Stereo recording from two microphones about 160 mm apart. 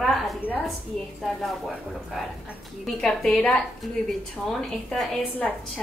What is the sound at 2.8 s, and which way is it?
A woman's voice, 5° left (ahead or behind).